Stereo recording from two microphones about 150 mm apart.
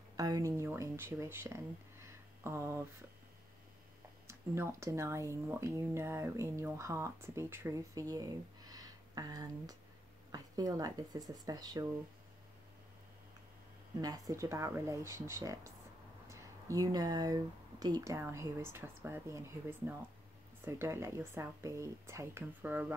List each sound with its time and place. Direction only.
0.2 s speech: 25° right (ahead or behind)
4.3 s speech: 20° right (ahead or behind)
14.0 s speech: 25° right (ahead or behind)